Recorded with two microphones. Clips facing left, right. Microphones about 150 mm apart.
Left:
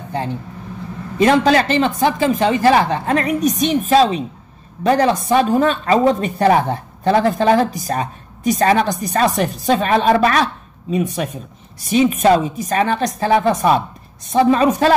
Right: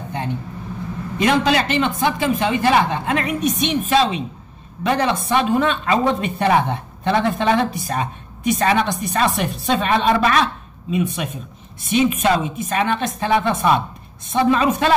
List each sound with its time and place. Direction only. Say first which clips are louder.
1.1 s speech: left 4 dB; 40° left (ahead or behind)